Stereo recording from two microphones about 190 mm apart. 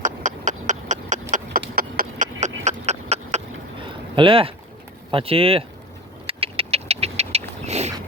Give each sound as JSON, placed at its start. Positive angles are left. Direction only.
{"t": 0.0, "sound": "clip-clop", "side_deg": -40}
{"t": 1.5, "sound": "clip-clop", "side_deg": -55}
{"t": 2.6, "sound": "a sound", "side_deg": -35}
{"t": 5.1, "sound": "speech", "side_deg": -30}
{"t": 6.2, "sound": "vehicle", "side_deg": -30}